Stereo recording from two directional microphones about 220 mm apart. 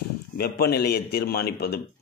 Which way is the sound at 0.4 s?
45° left (ahead or behind).